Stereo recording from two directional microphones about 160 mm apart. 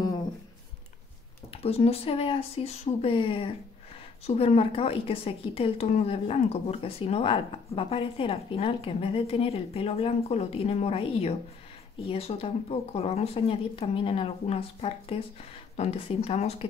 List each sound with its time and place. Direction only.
1.5 s a woman's voice: 40° left (ahead or behind)